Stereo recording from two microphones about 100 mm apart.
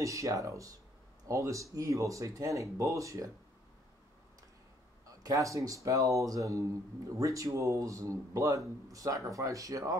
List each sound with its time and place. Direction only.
0.0 s speech: 30° right (ahead or behind)
5.0 s speech: 35° right (ahead or behind)